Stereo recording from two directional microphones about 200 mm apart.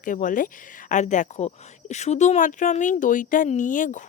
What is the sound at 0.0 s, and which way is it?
Speech, 40° left (ahead or behind).